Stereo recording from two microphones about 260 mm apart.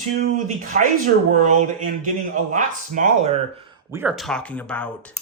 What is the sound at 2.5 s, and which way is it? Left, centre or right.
Speech, right.